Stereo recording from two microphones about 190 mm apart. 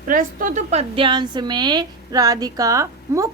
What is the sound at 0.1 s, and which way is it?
A woman's voice, 45° right (ahead or behind).